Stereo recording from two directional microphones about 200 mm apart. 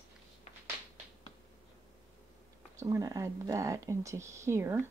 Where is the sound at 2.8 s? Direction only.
15° right (ahead or behind).